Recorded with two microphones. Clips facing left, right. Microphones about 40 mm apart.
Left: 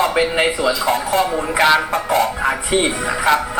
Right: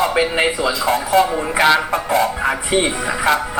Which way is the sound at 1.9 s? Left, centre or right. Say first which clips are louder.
Even; left.